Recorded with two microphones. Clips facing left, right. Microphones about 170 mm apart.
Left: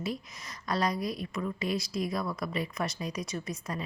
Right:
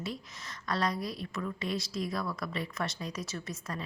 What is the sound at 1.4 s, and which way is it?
Speech, 20° left (ahead or behind).